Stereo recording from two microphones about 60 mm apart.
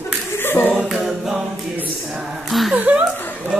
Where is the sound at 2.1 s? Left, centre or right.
Centre.